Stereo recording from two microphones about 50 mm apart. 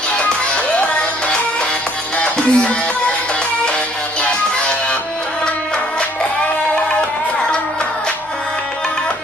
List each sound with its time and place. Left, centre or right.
2.1 s music: left
4.2 s music: centre